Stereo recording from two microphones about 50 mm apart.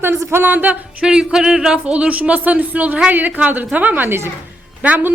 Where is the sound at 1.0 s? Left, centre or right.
Centre.